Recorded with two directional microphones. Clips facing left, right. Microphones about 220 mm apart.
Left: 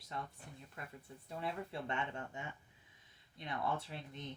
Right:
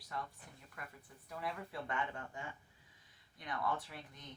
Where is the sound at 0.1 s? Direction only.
25° left (ahead or behind).